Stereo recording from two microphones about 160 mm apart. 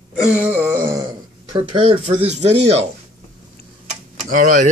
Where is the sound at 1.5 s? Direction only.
35° right (ahead or behind).